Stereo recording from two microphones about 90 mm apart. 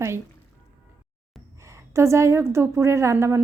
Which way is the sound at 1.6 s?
35° right (ahead or behind).